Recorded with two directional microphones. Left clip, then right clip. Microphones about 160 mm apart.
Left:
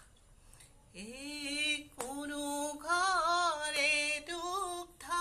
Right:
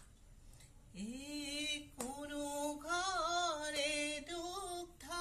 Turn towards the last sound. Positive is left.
turn(degrees=-25)  # may be behind; listen again after turning